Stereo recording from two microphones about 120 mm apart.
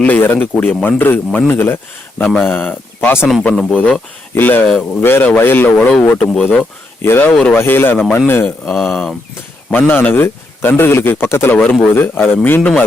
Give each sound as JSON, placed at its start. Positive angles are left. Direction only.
{"t": 0.0, "sound": "speech", "side_deg": 15}
{"t": 3.5, "sound": "speech", "side_deg": 0}
{"t": 4.4, "sound": "speech", "side_deg": 15}
{"t": 7.0, "sound": "speech", "side_deg": 20}
{"t": 8.6, "sound": "speech", "side_deg": 0}
{"t": 9.6, "sound": "speech", "side_deg": 15}